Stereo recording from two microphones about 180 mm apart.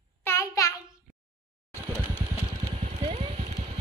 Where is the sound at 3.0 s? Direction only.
35° right (ahead or behind).